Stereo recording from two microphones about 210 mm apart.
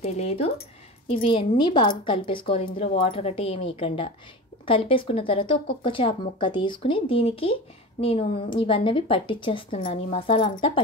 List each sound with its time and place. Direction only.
0.0 s a woman's voice: 30° left (ahead or behind)